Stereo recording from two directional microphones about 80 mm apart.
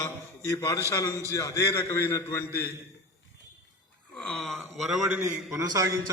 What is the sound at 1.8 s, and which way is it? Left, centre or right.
Speech, left.